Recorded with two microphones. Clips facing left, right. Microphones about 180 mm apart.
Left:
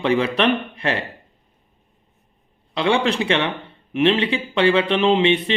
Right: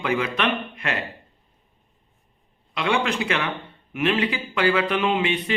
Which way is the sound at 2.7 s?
30° left (ahead or behind).